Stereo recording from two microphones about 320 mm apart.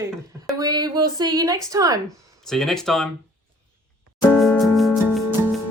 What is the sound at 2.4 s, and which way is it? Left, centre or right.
Speech, centre.